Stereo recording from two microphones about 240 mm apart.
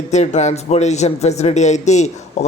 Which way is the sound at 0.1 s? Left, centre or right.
Left.